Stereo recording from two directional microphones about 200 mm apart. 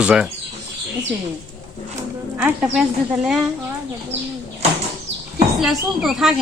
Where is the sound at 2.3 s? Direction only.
10° right (ahead or behind).